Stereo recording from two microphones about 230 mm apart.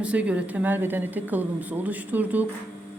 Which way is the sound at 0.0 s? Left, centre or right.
Centre.